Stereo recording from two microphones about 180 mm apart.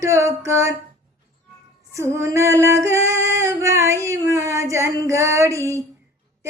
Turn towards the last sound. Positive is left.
turn(degrees=-15)  # may be behind; listen again after turning